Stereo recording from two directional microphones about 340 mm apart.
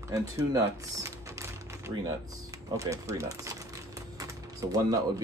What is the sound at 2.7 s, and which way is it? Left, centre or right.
Speech, centre.